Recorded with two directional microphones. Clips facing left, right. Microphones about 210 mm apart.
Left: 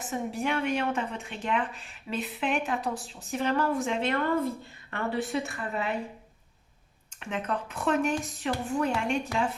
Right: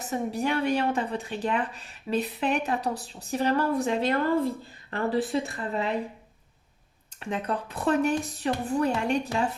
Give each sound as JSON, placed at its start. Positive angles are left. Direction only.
{"t": 0.0, "sound": "speech", "side_deg": -40}
{"t": 7.2, "sound": "speech", "side_deg": -35}